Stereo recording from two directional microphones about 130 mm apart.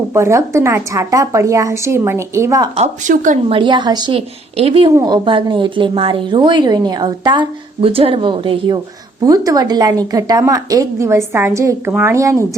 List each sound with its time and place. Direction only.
0.1 s a woman's voice: 20° right (ahead or behind)
2.7 s speech: 65° right (ahead or behind)
3.5 s a woman's voice: 40° right (ahead or behind)
4.5 s speech: 50° right (ahead or behind)
4.9 s a woman's voice: 30° right (ahead or behind)
9.2 s a woman's voice: 25° right (ahead or behind)